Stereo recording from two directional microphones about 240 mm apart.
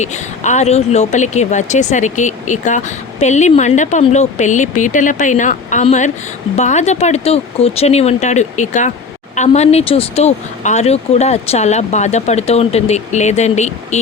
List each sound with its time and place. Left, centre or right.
0.0 s a woman's voice: left